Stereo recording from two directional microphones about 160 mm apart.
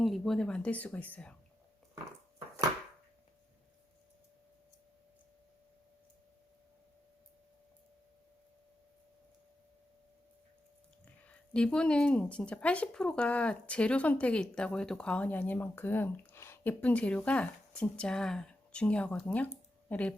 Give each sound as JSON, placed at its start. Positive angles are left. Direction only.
{"t": 0.0, "sound": "speech", "side_deg": 0}
{"t": 11.3, "sound": "speech", "side_deg": 5}